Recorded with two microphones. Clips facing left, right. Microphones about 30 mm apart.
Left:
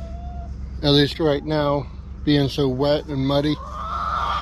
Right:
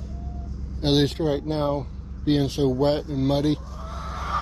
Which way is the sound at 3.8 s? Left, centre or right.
Left.